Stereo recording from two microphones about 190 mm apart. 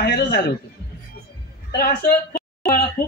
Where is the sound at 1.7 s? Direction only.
55° left (ahead or behind).